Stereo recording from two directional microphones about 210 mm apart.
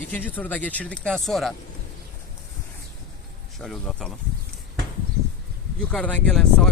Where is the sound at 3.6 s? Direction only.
Centre (ahead or behind).